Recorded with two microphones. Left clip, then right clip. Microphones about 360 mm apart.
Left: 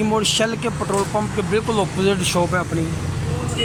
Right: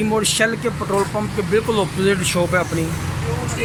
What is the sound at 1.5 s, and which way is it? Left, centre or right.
Speech, centre.